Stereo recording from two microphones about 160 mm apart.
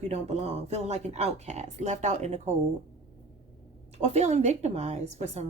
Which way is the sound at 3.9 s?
45° right (ahead or behind).